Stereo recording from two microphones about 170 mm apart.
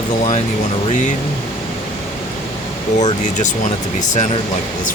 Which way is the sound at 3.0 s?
45° left (ahead or behind).